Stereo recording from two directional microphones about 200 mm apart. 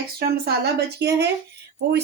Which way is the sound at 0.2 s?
55° right (ahead or behind).